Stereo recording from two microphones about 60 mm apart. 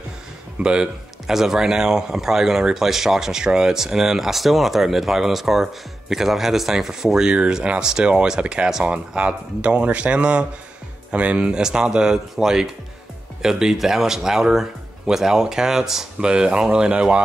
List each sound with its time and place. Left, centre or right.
0.6 s speech: centre